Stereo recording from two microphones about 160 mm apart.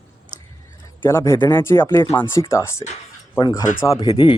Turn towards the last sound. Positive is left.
turn(degrees=25)  # may be behind; listen again after turning